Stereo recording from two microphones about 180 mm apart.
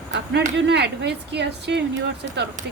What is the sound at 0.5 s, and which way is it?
Speech, 70° right (ahead or behind).